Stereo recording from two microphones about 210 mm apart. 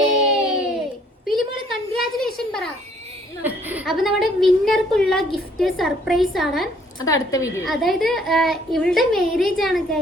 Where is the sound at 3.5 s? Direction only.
10° right (ahead or behind).